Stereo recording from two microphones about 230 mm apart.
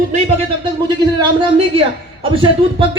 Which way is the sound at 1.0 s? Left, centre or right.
Centre.